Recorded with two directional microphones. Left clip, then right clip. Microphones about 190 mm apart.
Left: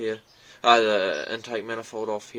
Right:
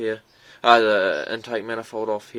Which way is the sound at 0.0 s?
35° right (ahead or behind).